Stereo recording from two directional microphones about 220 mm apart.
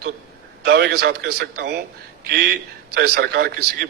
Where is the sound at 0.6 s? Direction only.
50° right (ahead or behind).